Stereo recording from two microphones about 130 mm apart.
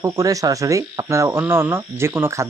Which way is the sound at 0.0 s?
25° right (ahead or behind).